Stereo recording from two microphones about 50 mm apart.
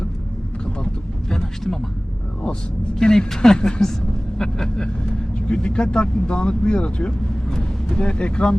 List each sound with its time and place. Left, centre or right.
1.3 s speech: centre
3.0 s speech: centre